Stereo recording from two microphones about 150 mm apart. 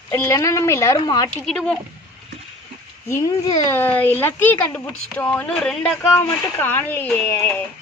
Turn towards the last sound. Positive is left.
turn(degrees=15)  # may be behind; listen again after turning